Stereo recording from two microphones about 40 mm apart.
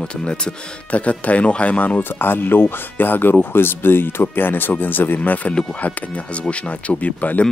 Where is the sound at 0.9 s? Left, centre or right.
Left.